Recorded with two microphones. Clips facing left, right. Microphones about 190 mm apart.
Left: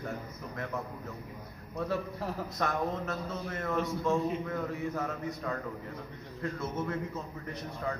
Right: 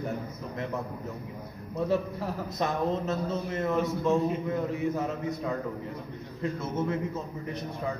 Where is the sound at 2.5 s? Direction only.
25° right (ahead or behind).